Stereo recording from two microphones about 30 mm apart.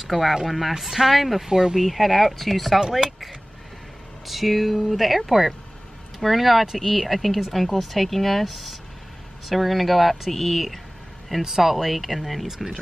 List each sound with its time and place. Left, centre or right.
0.0 s speech: centre
1.5 s speech: centre
1.9 s speech: centre
11.4 s speech: centre